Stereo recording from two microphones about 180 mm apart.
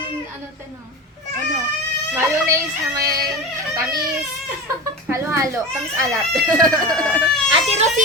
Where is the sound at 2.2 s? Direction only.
15° right (ahead or behind).